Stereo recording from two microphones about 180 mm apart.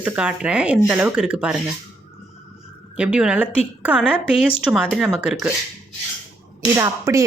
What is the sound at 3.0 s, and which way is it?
Speech, 5° right (ahead or behind).